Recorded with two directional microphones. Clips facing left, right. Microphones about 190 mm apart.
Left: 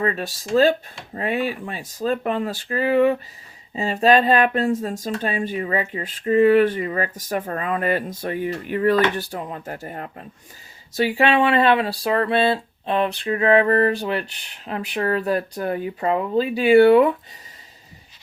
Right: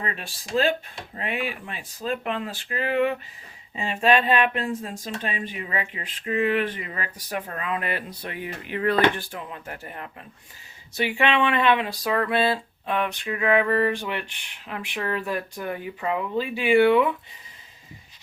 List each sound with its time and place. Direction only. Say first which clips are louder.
0.0 s speech: left 9 dB; 40° left (ahead or behind)